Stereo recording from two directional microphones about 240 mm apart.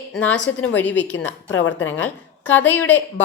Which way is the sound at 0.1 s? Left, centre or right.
Centre.